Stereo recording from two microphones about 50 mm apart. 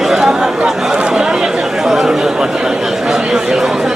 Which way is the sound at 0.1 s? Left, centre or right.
Centre.